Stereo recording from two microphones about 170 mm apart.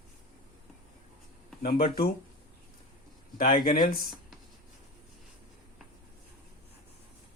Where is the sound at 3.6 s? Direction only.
60° left (ahead or behind).